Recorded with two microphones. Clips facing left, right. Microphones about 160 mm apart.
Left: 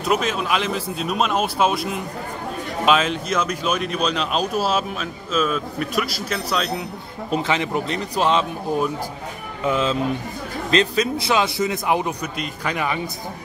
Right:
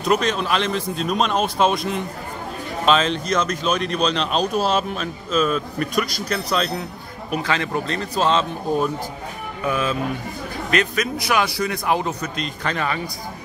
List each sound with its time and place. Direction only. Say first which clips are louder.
0.0 s speech: right 1 dB; 5° left (ahead or behind)
7.2 s speech: left 2 dB; 20° left (ahead or behind)
9.7 s a man's voice: left 2 dB; 25° left (ahead or behind)